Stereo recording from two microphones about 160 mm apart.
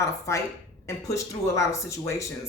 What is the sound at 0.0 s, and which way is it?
Speech, 20° left (ahead or behind).